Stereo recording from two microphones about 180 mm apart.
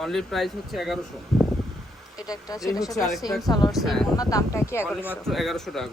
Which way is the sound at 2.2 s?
20° left (ahead or behind).